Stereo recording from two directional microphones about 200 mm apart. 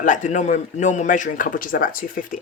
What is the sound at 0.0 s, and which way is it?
Speech, 40° left (ahead or behind).